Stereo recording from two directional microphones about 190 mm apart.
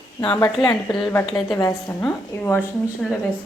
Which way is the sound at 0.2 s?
20° left (ahead or behind).